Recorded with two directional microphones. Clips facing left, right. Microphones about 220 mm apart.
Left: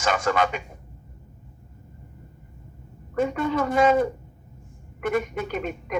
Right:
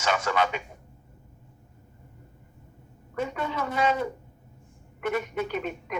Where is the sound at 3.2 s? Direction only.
50° left (ahead or behind).